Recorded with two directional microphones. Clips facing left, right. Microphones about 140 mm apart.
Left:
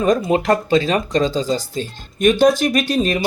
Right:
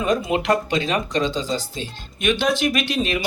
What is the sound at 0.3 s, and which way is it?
Speech, 40° left (ahead or behind).